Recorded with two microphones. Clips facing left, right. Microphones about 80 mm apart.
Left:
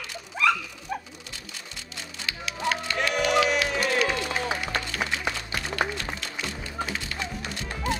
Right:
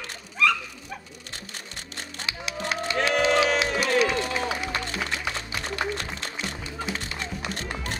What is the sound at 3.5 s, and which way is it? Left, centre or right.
Music, right.